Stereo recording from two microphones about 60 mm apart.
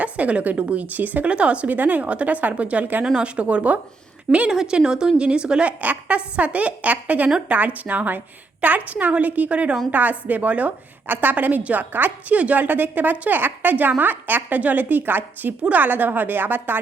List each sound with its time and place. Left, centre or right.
0.0 s a woman's voice: right